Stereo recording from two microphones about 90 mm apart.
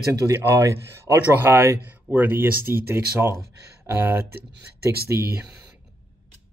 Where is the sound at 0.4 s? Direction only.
30° right (ahead or behind).